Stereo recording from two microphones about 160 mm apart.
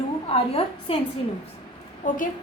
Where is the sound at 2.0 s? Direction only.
50° left (ahead or behind).